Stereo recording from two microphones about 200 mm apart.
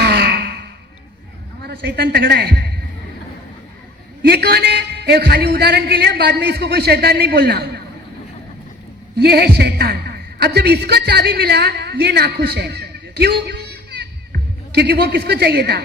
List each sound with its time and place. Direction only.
0.0 s sigh: 55° right (ahead or behind)
1.6 s a man's voice: 55° right (ahead or behind)
4.2 s a man's voice: 55° right (ahead or behind)
9.1 s a woman's voice: 55° right (ahead or behind)